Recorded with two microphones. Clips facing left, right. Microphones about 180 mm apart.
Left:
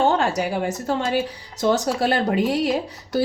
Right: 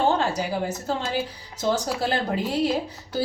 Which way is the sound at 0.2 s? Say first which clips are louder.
Left 3 dB; 80° left.